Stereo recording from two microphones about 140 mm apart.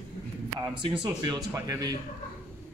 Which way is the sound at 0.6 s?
30° right (ahead or behind).